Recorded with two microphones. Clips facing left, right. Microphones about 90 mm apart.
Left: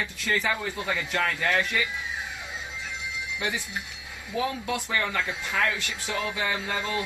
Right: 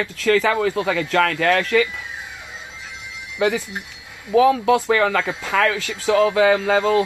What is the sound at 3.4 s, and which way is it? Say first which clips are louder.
Speech: right 13 dB; 90° right.